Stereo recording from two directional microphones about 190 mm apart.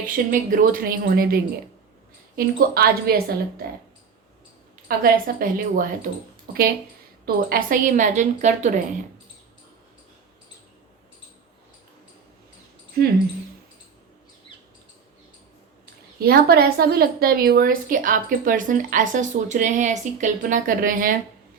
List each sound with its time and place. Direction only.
0.0 s a woman's voice: 45° right (ahead or behind)
4.9 s a woman's voice: 50° right (ahead or behind)
7.3 s a woman's voice: 45° right (ahead or behind)
16.2 s a woman's voice: 55° right (ahead or behind)